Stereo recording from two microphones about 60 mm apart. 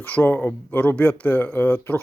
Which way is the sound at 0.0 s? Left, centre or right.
Left.